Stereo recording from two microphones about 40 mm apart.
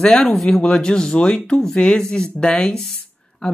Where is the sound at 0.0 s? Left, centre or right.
Left.